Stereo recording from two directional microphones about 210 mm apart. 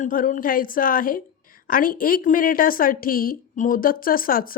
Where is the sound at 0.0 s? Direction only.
40° left (ahead or behind).